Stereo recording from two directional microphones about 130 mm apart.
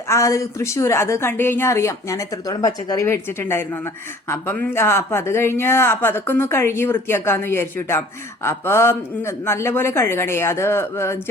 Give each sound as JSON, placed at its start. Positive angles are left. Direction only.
{"t": 0.1, "sound": "speech", "side_deg": 25}